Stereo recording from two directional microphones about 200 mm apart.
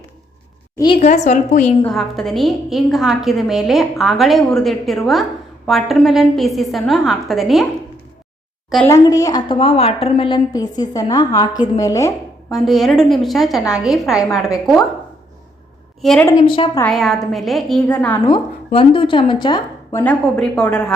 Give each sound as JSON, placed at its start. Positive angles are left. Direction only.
{"t": 0.9, "sound": "a woman's voice", "side_deg": 35}
{"t": 1.8, "sound": "a woman's voice", "side_deg": 0}
{"t": 8.9, "sound": "a woman's voice", "side_deg": 15}
{"t": 12.5, "sound": "a woman's voice", "side_deg": 0}
{"t": 16.0, "sound": "a woman's voice", "side_deg": 0}
{"t": 16.4, "sound": "a woman's voice", "side_deg": 25}
{"t": 16.8, "sound": "a woman's voice", "side_deg": 0}
{"t": 18.3, "sound": "a woman's voice", "side_deg": 25}